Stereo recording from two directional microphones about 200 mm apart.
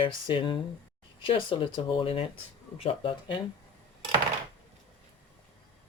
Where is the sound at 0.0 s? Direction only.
25° left (ahead or behind).